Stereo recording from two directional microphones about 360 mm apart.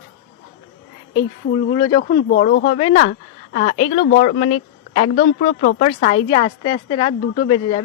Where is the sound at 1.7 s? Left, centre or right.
Centre.